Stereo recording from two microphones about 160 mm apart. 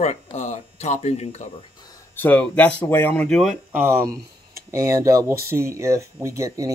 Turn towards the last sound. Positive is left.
turn(degrees=-20)  # may be behind; listen again after turning